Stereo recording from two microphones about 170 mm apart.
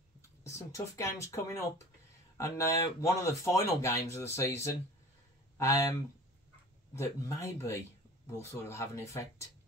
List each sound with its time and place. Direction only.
0.4 s speech: 20° left (ahead or behind)